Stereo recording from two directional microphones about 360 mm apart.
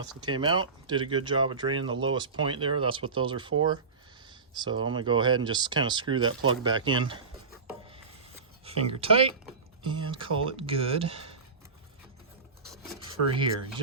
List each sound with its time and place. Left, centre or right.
0.2 s speech: centre
7.7 s rub: centre
8.6 s speech: centre
13.1 s speech: centre